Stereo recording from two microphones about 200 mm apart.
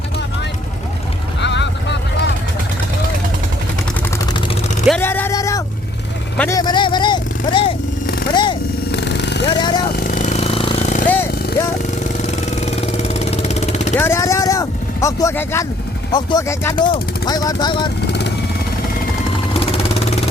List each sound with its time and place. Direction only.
1.4 s boat: 60° left (ahead or behind)
4.9 s a sound: 10° left (ahead or behind)
6.5 s vehicle: 20° left (ahead or behind)
8.3 s a sound: 25° left (ahead or behind)
8.9 s vehicle: 60° left (ahead or behind)
9.5 s a sound: 20° left (ahead or behind)
9.9 s a sound: 45° left (ahead or behind)
12.2 s vehicle: 35° left (ahead or behind)
13.9 s vehicle: 10° left (ahead or behind)
16.1 s speech: 15° left (ahead or behind)
18.0 s vehicle: 60° left (ahead or behind)
19.5 s vehicle: 30° left (ahead or behind)